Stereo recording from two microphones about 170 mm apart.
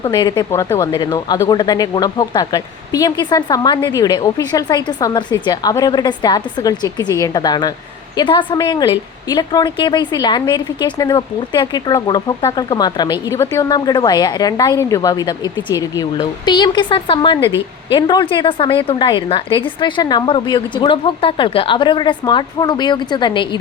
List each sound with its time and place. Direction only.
0.0 s a woman's voice: 25° left (ahead or behind)